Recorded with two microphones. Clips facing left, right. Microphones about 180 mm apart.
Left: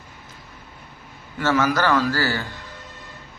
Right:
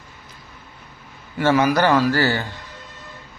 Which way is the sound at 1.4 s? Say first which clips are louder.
Right 3 dB; 15° right (ahead or behind).